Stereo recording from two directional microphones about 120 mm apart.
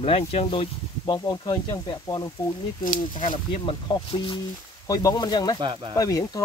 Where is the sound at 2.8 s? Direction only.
90° left.